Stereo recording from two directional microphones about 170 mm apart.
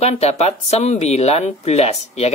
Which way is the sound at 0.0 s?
40° left (ahead or behind).